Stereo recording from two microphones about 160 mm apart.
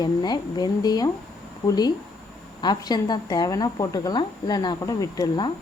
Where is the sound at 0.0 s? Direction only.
25° left (ahead or behind).